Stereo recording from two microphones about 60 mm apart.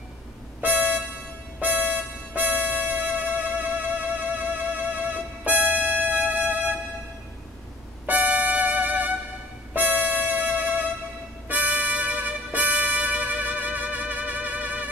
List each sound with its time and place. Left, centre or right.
0.6 s music: right
8.1 s music: right